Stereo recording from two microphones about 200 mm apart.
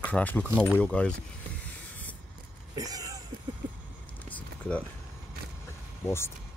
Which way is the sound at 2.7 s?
20° right (ahead or behind).